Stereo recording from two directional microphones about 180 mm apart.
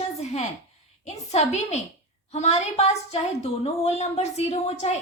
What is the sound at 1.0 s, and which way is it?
A woman's voice, 40° left (ahead or behind).